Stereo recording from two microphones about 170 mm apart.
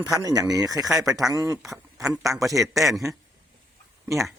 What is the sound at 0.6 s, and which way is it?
Speech, centre (ahead or behind).